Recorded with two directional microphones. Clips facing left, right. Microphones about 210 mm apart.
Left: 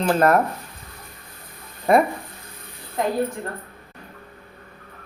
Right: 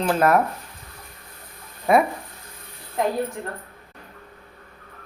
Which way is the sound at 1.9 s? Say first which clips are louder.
Left 1 dB; 5° right (ahead or behind).